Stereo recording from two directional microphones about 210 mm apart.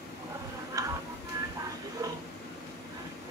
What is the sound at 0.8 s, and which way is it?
Music, 15° right (ahead or behind).